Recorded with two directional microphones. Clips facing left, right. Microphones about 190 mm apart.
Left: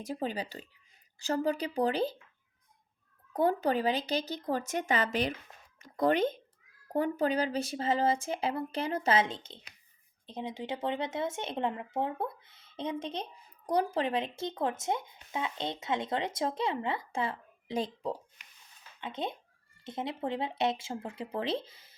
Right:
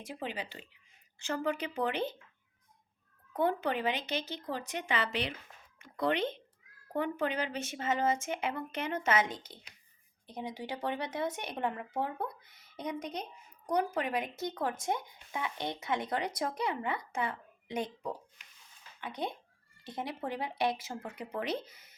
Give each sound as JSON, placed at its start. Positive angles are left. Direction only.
{"t": 0.0, "sound": "speech", "side_deg": 40}
{"t": 3.3, "sound": "speech", "side_deg": 40}